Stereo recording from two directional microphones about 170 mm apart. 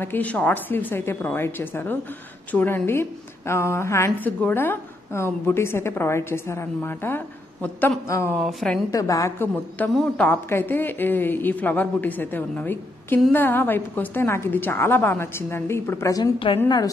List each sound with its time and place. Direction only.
0.0 s a woman's voice: 10° left (ahead or behind)
8.4 s speech: centre (ahead or behind)
8.9 s a woman's voice: 20° left (ahead or behind)